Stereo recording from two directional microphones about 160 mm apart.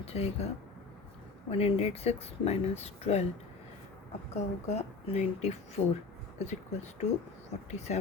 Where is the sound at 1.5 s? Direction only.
40° left (ahead or behind).